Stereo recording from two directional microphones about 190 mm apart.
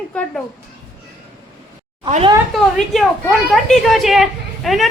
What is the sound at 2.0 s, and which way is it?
Speech, 30° right (ahead or behind).